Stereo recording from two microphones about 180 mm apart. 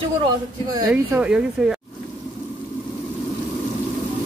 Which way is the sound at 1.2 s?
5° right (ahead or behind).